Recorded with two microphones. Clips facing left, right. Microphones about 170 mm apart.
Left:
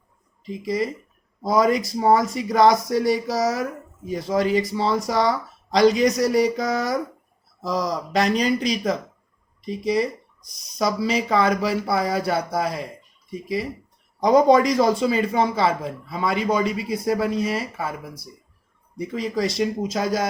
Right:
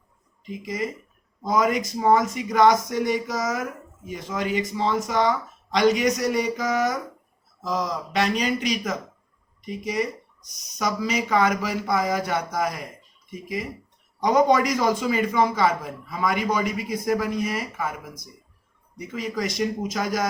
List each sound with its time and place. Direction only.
0.4 s speech: 35° left (ahead or behind)